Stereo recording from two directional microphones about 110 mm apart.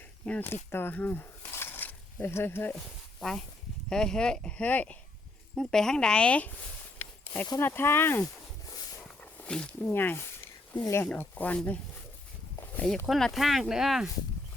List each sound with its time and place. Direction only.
0.3 s speech: 20° left (ahead or behind)
2.7 s speech: 5° left (ahead or behind)
7.6 s speech: 20° left (ahead or behind)
8.6 s a sound: 35° left (ahead or behind)
9.0 s a sound: 10° left (ahead or behind)
10.8 s speech: 25° left (ahead or behind)
13.1 s speech: centre (ahead or behind)